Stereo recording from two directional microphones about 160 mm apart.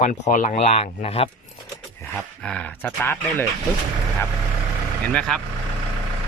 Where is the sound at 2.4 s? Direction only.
5° left (ahead or behind).